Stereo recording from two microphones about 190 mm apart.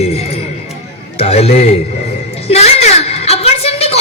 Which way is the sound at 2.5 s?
30° left (ahead or behind).